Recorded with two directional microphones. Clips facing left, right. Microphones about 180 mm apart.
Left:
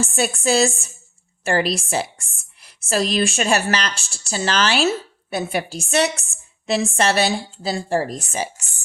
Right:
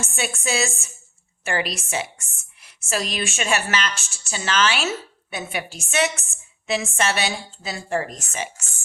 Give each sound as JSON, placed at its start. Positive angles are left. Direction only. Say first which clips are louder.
{"t": 0.0, "sound": "a woman's voice", "louder": "left 7 dB", "side_deg": 35}